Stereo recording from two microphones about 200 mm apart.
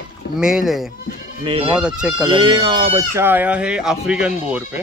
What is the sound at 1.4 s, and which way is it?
Speech, 25° right (ahead or behind).